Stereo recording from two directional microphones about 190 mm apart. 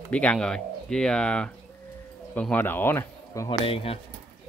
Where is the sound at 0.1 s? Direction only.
5° left (ahead or behind).